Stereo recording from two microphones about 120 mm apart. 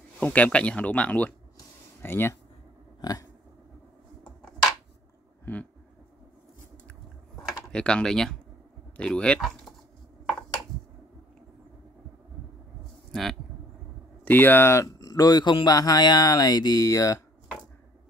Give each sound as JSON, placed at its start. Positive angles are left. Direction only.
{"t": 0.2, "sound": "speech", "side_deg": 10}
{"t": 3.0, "sound": "a sound", "side_deg": 30}
{"t": 5.4, "sound": "a sound", "side_deg": 15}
{"t": 7.7, "sound": "speech", "side_deg": 10}
{"t": 13.1, "sound": "speech", "side_deg": 0}
{"t": 14.2, "sound": "speech", "side_deg": 15}